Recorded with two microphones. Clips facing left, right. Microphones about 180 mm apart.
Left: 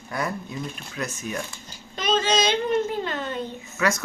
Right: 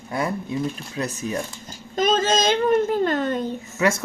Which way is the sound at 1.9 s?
45° right (ahead or behind).